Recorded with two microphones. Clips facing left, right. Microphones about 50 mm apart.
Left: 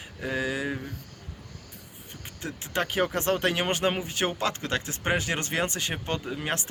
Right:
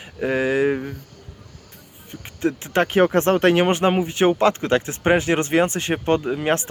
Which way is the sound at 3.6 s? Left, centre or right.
Right.